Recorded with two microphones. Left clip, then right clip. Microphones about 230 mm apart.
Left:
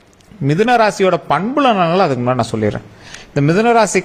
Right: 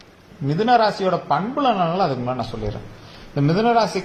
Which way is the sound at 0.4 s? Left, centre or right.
Left.